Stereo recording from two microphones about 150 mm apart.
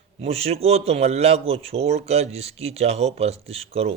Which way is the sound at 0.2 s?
40° right (ahead or behind).